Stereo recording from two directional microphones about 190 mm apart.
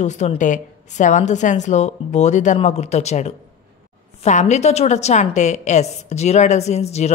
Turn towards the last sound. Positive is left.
turn(degrees=35)  # may be behind; listen again after turning